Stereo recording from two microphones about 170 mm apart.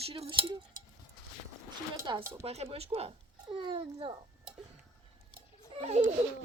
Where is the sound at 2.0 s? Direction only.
20° right (ahead or behind).